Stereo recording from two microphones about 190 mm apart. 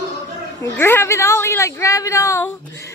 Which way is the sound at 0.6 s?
10° left (ahead or behind).